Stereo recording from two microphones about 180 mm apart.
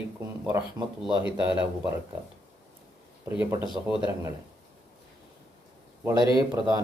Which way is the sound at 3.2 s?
15° right (ahead or behind).